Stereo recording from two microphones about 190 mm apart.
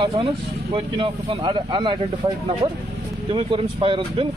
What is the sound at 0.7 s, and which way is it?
Speech, 25° right (ahead or behind).